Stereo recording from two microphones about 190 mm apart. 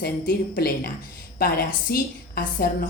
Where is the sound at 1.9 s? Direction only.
50° left (ahead or behind).